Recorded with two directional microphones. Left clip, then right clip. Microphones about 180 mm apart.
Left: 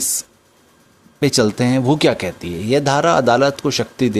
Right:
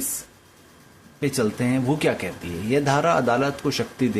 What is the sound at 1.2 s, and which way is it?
Speech, 60° left (ahead or behind).